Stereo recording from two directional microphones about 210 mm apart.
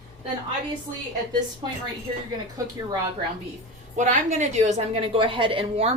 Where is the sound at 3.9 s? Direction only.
35° right (ahead or behind).